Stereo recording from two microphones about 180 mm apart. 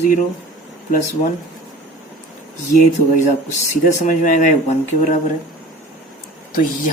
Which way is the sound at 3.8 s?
45° left (ahead or behind).